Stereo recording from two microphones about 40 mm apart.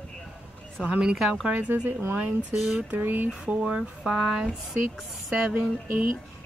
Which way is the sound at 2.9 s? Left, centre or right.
Right.